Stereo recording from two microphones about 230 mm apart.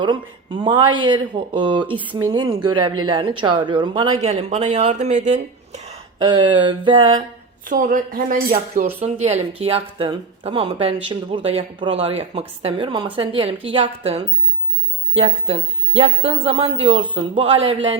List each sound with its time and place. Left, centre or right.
0.0 s speech: centre
7.6 s a woman's voice: right